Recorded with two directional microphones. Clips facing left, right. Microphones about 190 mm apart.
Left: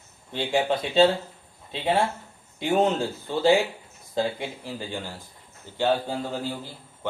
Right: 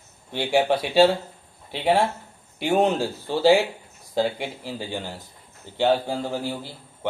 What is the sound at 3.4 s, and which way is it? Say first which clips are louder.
Speech: right 2 dB; 15° right (ahead or behind).